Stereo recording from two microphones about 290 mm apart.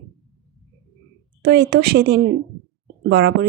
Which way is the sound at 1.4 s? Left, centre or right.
Right.